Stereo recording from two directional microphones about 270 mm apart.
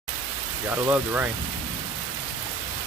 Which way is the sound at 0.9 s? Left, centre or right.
Centre.